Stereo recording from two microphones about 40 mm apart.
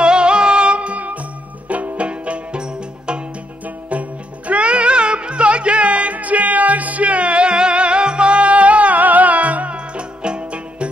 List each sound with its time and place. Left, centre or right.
0.0 s music: right
3.6 s music: right